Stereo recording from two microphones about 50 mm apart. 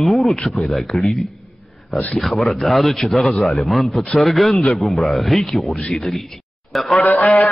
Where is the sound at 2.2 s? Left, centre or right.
Centre.